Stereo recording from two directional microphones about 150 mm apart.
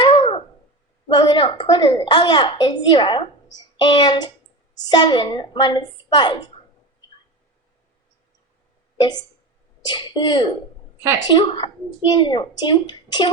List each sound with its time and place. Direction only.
0.0 s a sound: 35° left (ahead or behind)
1.0 s a woman's voice: 30° left (ahead or behind)
9.0 s a woman's voice: 30° left (ahead or behind)